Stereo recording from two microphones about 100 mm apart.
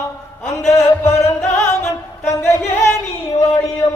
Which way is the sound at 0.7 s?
30° left (ahead or behind).